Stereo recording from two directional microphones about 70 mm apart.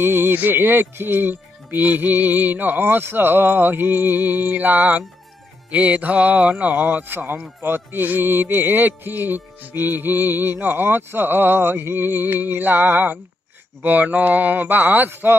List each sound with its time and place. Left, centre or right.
0.0 s music: right